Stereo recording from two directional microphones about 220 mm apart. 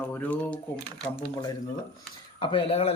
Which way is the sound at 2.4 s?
25° left (ahead or behind).